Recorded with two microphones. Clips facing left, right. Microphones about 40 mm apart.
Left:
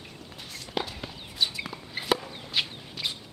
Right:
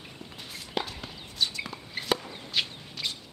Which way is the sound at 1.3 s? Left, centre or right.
Centre.